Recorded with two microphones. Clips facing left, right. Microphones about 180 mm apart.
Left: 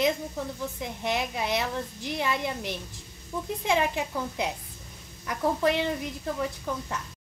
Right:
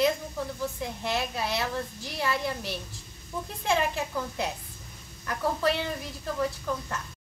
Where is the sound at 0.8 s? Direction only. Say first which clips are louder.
Left 3 dB; 20° left (ahead or behind).